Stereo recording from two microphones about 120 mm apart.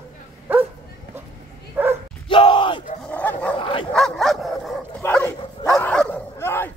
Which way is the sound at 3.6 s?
45° left (ahead or behind).